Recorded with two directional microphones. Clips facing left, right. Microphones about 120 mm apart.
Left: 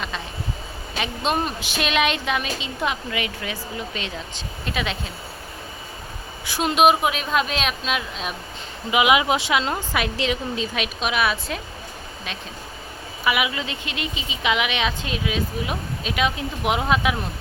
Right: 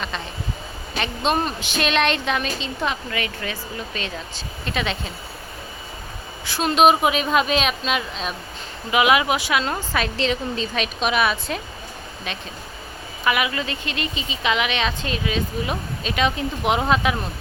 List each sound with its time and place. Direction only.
0.9 s speech: 5° left (ahead or behind)
4.6 s speech: 5° left (ahead or behind)
6.4 s speech: 15° left (ahead or behind)
6.8 s speech: centre (ahead or behind)
8.9 s speech: 15° left (ahead or behind); by 11.6 s centre (ahead or behind)
13.2 s speech: 10° left (ahead or behind)